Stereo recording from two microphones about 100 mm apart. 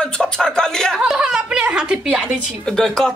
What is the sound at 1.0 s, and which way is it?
A woman's voice, 5° right (ahead or behind).